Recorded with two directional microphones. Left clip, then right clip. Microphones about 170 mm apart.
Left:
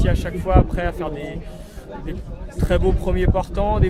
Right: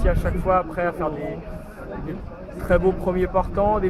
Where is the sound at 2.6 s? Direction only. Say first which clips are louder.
Right 1 dB; 10° left (ahead or behind).